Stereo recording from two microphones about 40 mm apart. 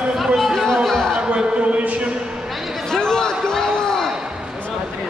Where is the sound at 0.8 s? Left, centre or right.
Centre.